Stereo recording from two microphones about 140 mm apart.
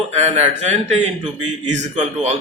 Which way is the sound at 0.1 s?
50° right (ahead or behind).